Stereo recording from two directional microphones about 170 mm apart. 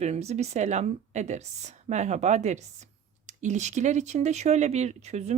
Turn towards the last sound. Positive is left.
turn(degrees=-40)  # may be behind; listen again after turning